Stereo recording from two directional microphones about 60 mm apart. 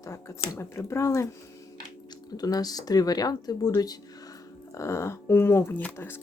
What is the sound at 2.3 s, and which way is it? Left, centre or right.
Speech, left.